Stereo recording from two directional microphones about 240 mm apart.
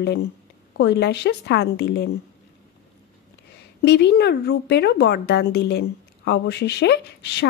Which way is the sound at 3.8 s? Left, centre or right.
Left.